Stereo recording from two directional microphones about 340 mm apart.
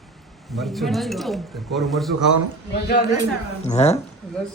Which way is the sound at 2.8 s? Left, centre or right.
Left.